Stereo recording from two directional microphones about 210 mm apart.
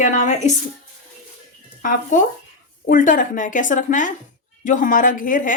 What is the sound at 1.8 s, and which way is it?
Speech, 40° left (ahead or behind).